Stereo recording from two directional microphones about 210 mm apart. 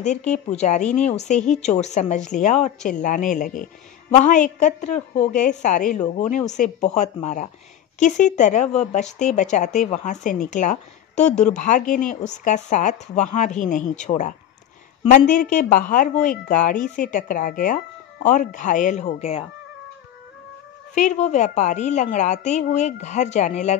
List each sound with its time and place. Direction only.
0.3 s a woman's voice: 35° left (ahead or behind)
20.9 s a woman's voice: 35° left (ahead or behind)